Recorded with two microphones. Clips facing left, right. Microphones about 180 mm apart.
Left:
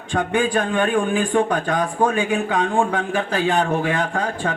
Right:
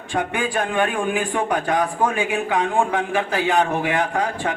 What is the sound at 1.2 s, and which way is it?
A man's voice, 20° right (ahead or behind).